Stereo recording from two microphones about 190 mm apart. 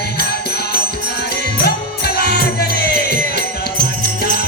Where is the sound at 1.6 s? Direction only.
55° left (ahead or behind).